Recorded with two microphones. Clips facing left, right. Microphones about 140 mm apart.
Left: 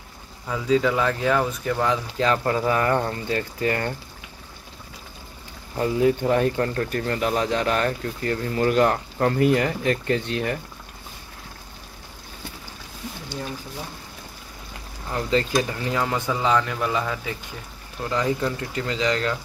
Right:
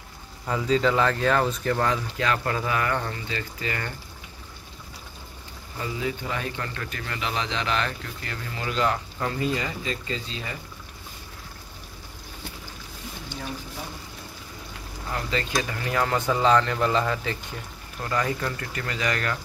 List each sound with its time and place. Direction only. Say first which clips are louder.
0.5 s speech: left 2 dB; 5° left (ahead or behind)
2.1 s speech: left 4 dB; 25° left (ahead or behind); by 3.9 s 45° left (ahead or behind)
5.8 s speech: left 10 dB; 55° left (ahead or behind)
15.3 s speech: left 7 dB; 25° left (ahead or behind)
16.3 s speech: right 3 dB; 10° left (ahead or behind)